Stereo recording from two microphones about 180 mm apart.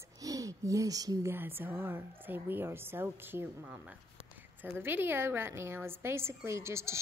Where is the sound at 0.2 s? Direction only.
20° right (ahead or behind).